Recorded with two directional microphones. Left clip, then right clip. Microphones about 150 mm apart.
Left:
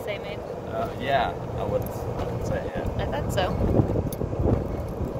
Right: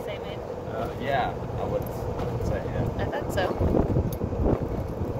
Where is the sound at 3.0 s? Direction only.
5° left (ahead or behind).